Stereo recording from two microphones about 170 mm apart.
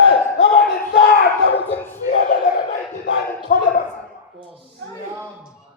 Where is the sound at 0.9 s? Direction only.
70° left (ahead or behind).